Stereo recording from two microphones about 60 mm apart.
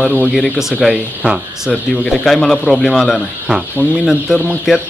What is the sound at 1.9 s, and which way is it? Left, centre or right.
Speech, centre.